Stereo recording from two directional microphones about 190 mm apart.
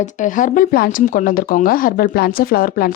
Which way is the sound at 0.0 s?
40° left (ahead or behind).